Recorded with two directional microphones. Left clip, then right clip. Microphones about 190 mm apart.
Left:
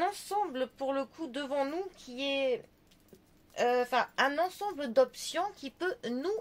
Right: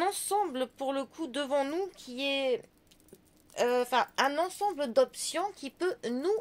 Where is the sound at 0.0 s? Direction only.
45° right (ahead or behind).